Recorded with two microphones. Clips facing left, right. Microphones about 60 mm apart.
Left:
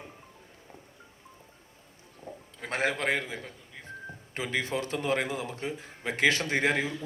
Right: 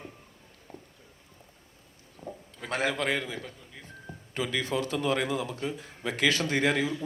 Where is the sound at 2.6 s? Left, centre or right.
Left.